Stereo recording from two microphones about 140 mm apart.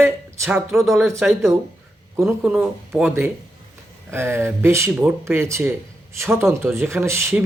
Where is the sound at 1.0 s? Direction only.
20° right (ahead or behind).